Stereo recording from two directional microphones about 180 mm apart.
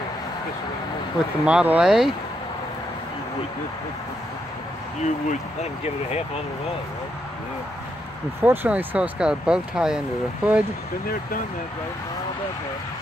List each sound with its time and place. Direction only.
1.4 s speech: 5° right (ahead or behind)
5.6 s speech: 35° left (ahead or behind)
8.4 s speech: 10° right (ahead or behind)